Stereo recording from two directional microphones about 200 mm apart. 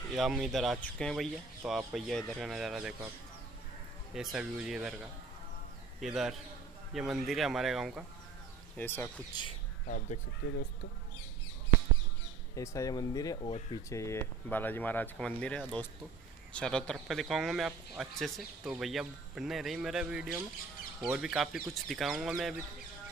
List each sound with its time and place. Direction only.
0.1 s speech: centre (ahead or behind)
4.1 s speech: centre (ahead or behind)
5.9 s a man's voice: centre (ahead or behind)
8.7 s speech: 10° left (ahead or behind)
9.3 s speech: 20° left (ahead or behind)
9.8 s speech: 40° left (ahead or behind)
12.5 s speech: 15° left (ahead or behind); by 22.6 s centre (ahead or behind)